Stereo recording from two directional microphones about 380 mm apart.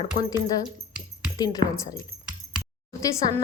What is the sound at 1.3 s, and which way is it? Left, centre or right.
Speech, centre.